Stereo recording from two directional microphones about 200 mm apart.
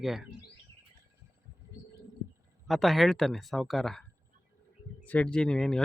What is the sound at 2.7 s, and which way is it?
Speech, centre (ahead or behind).